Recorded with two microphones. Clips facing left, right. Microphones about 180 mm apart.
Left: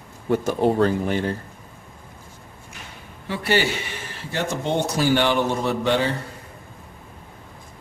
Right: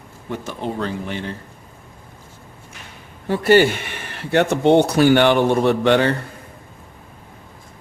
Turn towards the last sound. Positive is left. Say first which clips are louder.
# right 6 dB
turn(degrees=-65)  # may be behind; listen again after turning